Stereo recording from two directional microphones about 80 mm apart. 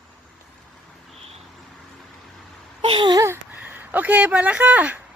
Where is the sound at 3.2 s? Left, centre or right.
Right.